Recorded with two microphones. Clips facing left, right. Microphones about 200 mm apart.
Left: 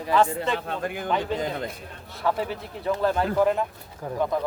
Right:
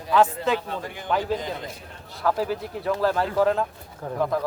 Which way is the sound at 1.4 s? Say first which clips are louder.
Left 3 dB; 55° left (ahead or behind).